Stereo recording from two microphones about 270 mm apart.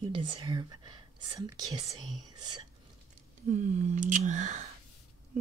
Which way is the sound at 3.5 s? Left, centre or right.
Right.